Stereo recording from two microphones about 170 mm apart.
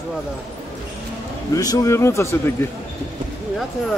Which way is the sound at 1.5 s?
20° left (ahead or behind).